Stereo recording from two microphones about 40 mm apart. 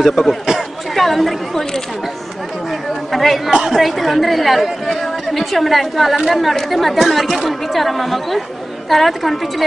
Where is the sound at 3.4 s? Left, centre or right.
Centre.